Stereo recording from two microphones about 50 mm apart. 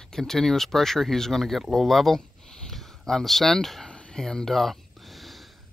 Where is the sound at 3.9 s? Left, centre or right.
Left.